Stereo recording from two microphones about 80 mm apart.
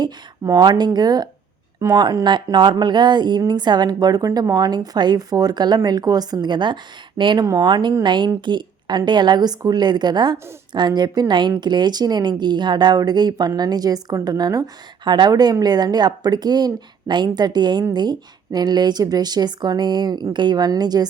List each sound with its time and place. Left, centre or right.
0.4 s a woman's voice: right
2.2 s a woman's voice: right
7.3 s speech: right
7.6 s a woman's voice: right
15.0 s a woman's voice: right
15.3 s a woman's voice: right